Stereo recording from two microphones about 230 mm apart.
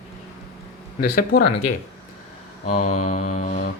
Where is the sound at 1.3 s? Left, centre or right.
Left.